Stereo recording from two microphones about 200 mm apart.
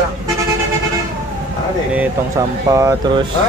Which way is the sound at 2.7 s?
15° right (ahead or behind).